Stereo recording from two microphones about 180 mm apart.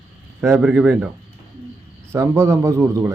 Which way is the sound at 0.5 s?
5° right (ahead or behind).